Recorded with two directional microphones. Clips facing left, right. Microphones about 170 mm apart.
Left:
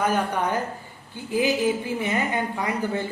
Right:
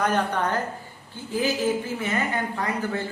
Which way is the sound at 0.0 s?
10° left (ahead or behind).